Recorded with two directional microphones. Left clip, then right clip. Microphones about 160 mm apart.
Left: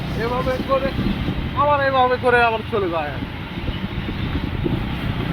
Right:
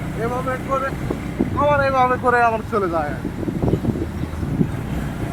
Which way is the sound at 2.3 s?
10° right (ahead or behind).